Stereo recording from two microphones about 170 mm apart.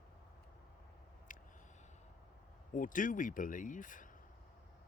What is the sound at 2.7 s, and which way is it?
Speech, 50° left (ahead or behind).